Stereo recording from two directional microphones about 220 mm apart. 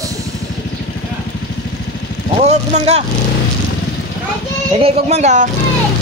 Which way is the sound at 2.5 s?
30° right (ahead or behind).